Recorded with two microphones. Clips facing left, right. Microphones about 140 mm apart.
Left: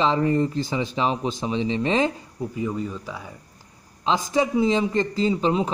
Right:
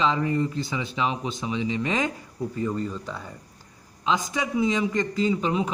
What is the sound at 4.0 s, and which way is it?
Speech, 35° left (ahead or behind).